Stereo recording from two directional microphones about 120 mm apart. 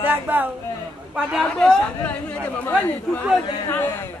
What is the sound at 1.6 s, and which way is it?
Speech, 10° left (ahead or behind).